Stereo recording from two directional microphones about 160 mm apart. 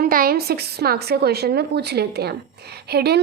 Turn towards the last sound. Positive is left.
turn(degrees=-85)